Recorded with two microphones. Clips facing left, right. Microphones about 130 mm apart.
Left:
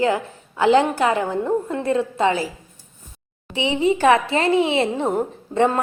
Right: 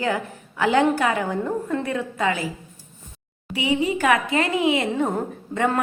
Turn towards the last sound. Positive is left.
turn(degrees=30)  # may be behind; listen again after turning